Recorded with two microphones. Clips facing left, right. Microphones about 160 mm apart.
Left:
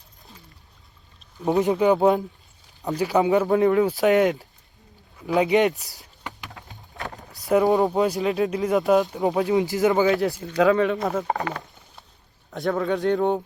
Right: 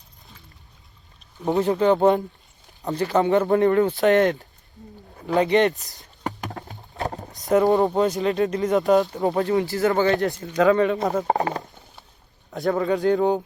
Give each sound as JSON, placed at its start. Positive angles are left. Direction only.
{"t": 1.4, "sound": "speech", "side_deg": 0}
{"t": 6.2, "sound": "a sound", "side_deg": -45}
{"t": 7.4, "sound": "speech", "side_deg": 0}
{"t": 11.3, "sound": "speech", "side_deg": -35}
{"t": 12.5, "sound": "speech", "side_deg": 0}